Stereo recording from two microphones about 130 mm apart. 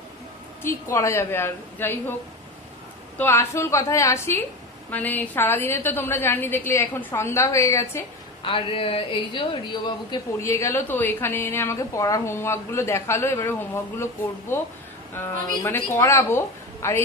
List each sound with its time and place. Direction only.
0.9 s a woman's voice: 20° left (ahead or behind)
3.2 s a woman's voice: 20° left (ahead or behind)
8.4 s a woman's voice: 45° left (ahead or behind)
10.3 s a woman's voice: 25° left (ahead or behind)